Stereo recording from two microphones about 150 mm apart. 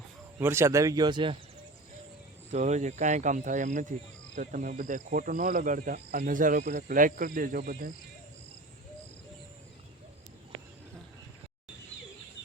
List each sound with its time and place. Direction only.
0.3 s speech: 15° right (ahead or behind); by 1.4 s 30° right (ahead or behind)
2.5 s speech: 50° right (ahead or behind); by 7.9 s 75° right (ahead or behind)